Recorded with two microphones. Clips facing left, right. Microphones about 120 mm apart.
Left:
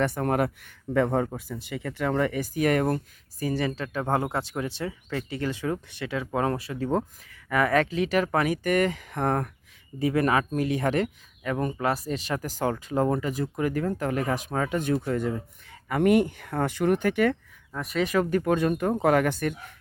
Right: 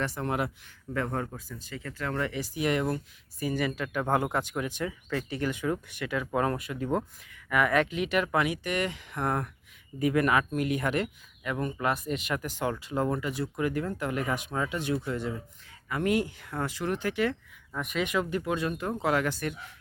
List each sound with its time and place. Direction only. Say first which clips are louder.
0.0 s speech: left 6 dB; 55° left (ahead or behind)
3.4 s speech: left 2 dB; 35° left (ahead or behind)
10.0 s speech: left 2 dB; 30° left (ahead or behind); by 17.3 s 55° left (ahead or behind)
18.0 s speech: left 6 dB; 45° left (ahead or behind)